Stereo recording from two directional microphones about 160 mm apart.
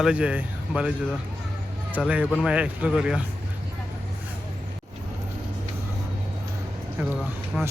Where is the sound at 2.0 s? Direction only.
5° right (ahead or behind).